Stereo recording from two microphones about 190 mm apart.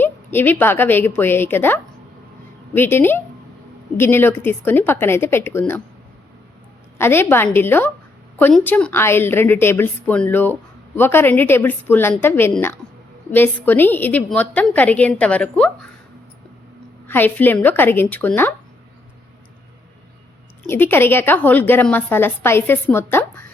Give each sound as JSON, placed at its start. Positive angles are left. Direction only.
{"t": 0.0, "sound": "a woman's voice", "side_deg": 10}
{"t": 7.0, "sound": "a woman's voice", "side_deg": 10}
{"t": 17.1, "sound": "a woman's voice", "side_deg": 10}
{"t": 20.7, "sound": "a woman's voice", "side_deg": 10}